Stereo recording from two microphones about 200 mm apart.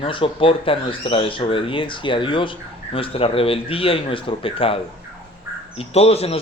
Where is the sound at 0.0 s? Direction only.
25° left (ahead or behind).